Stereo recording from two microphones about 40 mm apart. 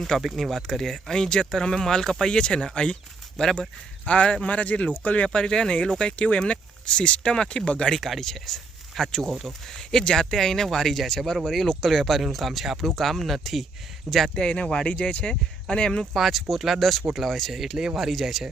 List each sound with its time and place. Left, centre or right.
0.2 s speech: centre
2.3 s speech: left
4.0 s speech: left
5.3 s speech: left
7.9 s speech: centre
9.9 s speech: centre
14.3 s speech: left
16.1 s speech: centre
17.2 s speech: centre
17.7 s speech: right
18.1 s speech: centre